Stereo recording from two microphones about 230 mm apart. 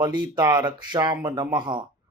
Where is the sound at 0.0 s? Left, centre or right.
Centre.